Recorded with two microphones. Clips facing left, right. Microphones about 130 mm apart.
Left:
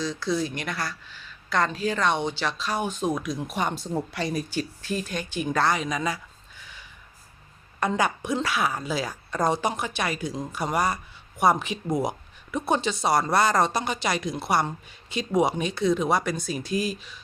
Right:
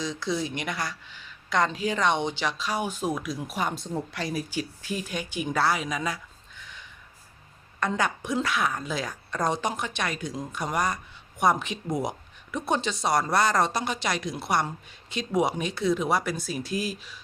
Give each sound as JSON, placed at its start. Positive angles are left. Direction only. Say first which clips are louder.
{"t": 0.0, "sound": "a woman's voice", "louder": "left 2 dB", "side_deg": -20}
{"t": 6.6, "sound": "a sound", "louder": "right 1 dB", "side_deg": 5}
{"t": 7.8, "sound": "a woman's voice", "louder": "left 2 dB", "side_deg": 10}